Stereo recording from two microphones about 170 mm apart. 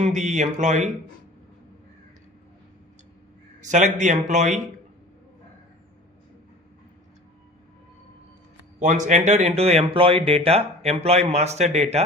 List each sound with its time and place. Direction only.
0.0 s speech: 45° right (ahead or behind)
3.6 s speech: 45° right (ahead or behind)
8.8 s speech: 45° right (ahead or behind)